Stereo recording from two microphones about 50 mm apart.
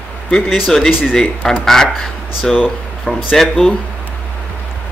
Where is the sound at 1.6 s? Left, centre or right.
Centre.